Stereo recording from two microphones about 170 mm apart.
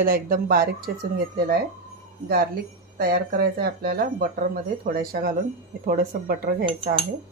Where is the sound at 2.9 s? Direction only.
60° right (ahead or behind).